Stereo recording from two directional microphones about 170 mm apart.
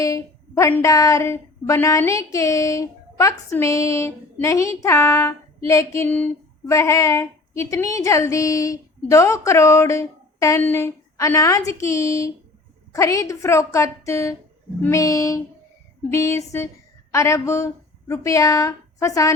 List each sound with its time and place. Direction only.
0.0 s a woman's voice: 20° left (ahead or behind)